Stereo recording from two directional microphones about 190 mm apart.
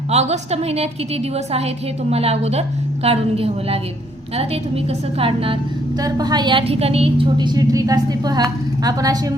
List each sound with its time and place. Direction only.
0.1 s a woman's voice: 35° right (ahead or behind); by 9.3 s 20° right (ahead or behind)